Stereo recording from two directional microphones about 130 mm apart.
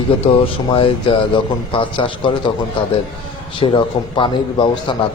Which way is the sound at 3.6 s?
40° left (ahead or behind).